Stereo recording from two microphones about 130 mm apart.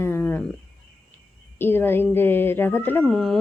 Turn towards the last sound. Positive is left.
turn(degrees=0)  # may be behind; listen again after turning